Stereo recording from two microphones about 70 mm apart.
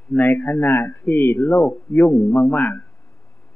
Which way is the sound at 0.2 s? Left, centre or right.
Left.